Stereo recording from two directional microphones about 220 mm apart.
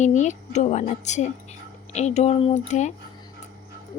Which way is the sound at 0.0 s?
35° left (ahead or behind).